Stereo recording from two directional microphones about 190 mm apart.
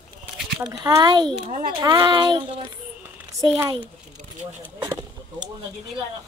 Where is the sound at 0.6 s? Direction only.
20° right (ahead or behind).